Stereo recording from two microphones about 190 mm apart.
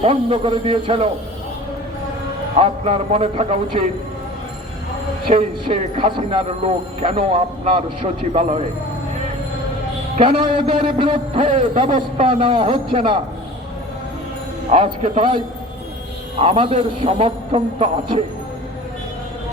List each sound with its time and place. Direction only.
0.0 s a man's voice: 30° right (ahead or behind)
2.6 s a man's voice: 30° right (ahead or behind)
5.3 s a man's voice: 30° right (ahead or behind)
10.2 s a man's voice: 30° right (ahead or behind)
11.4 s a man's voice: 40° right (ahead or behind)
14.7 s a man's voice: 35° right (ahead or behind)
16.4 s a man's voice: 30° right (ahead or behind)